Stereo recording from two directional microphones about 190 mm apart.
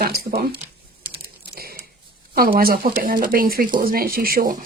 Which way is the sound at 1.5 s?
55° right (ahead or behind).